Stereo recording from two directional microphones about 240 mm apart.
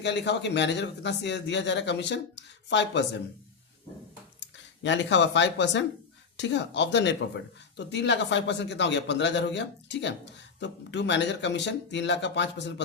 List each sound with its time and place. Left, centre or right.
0.0 s speech: left
4.4 s speech: left